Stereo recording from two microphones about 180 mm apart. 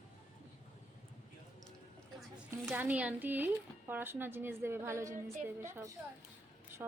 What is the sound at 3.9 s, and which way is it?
A woman's voice, 10° right (ahead or behind).